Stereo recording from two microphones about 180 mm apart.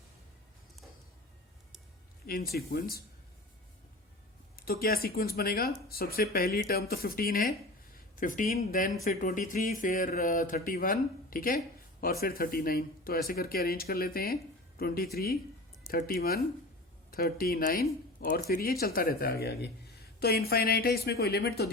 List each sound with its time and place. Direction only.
2.2 s speech: 55° left (ahead or behind)
4.5 s speech: 55° left (ahead or behind)